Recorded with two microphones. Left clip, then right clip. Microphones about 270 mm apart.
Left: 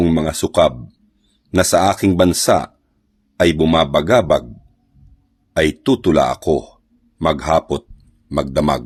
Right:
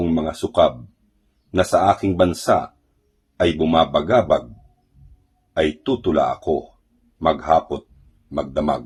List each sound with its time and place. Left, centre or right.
0.0 s a sound: left
1.5 s speech: left
5.5 s speech: left